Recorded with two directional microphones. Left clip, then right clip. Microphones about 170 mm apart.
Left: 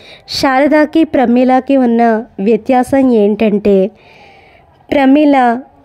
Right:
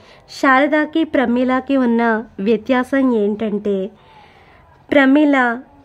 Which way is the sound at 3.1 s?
30° left (ahead or behind).